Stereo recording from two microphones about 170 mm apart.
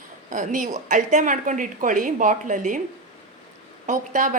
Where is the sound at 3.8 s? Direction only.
50° right (ahead or behind).